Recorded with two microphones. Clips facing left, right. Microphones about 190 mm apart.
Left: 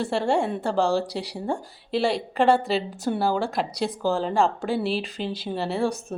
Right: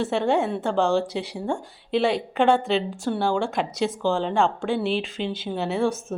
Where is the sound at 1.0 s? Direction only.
35° left (ahead or behind).